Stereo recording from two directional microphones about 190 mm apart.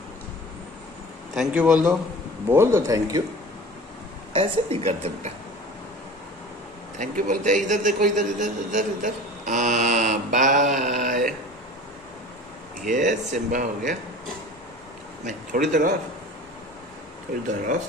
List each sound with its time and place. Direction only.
1.3 s a man's voice: 5° right (ahead or behind)
4.3 s a man's voice: 30° right (ahead or behind)
7.0 s a man's voice: 40° right (ahead or behind)
10.7 s mantra: 40° right (ahead or behind)
12.8 s a man's voice: 40° right (ahead or behind)
15.6 s a man's voice: 45° right (ahead or behind)